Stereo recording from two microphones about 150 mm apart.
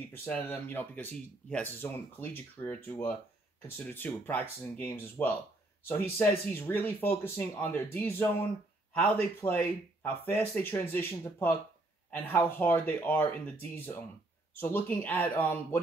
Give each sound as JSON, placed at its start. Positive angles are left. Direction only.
{"t": 0.1, "sound": "speech", "side_deg": 15}